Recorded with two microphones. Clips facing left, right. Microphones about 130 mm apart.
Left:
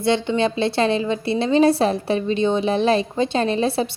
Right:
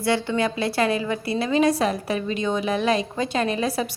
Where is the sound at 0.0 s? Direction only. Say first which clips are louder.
Left 3 dB; 20° left (ahead or behind).